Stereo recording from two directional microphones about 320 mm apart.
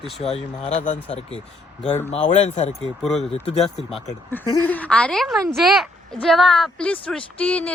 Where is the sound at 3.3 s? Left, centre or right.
Centre.